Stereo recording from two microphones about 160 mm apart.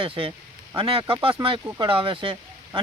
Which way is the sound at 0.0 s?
35° right (ahead or behind).